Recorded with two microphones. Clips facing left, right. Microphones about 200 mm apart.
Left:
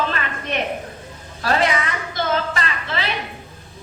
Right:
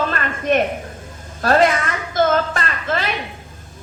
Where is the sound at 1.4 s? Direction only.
50° right (ahead or behind).